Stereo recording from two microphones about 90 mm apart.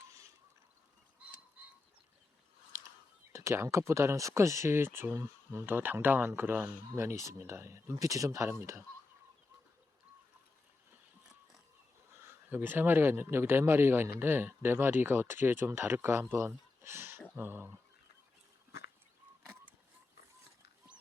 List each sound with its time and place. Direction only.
3.3 s speech: 35° right (ahead or behind)
12.5 s a man's voice: 20° right (ahead or behind)